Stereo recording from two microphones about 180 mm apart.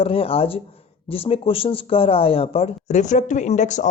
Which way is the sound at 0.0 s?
30° left (ahead or behind).